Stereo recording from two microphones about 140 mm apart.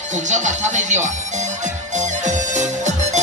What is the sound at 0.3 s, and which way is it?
Speech, 60° right (ahead or behind).